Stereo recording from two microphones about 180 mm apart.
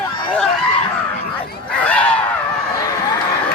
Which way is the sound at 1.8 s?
10° left (ahead or behind).